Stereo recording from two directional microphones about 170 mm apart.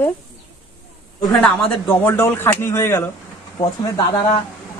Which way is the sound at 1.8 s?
10° left (ahead or behind).